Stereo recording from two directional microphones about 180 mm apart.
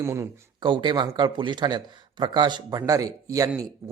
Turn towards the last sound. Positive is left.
turn(degrees=-15)  # may be behind; listen again after turning